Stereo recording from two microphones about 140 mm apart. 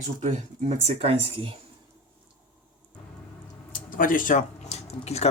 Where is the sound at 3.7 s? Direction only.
80° left; by 5.2 s 50° left (ahead or behind).